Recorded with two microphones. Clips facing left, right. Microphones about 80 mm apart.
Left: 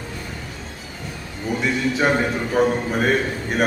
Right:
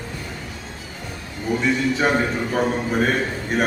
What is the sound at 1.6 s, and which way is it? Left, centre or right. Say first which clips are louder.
A man's voice: even; centre.